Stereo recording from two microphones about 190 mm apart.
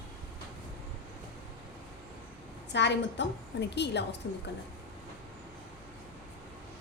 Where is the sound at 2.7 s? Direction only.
65° left (ahead or behind).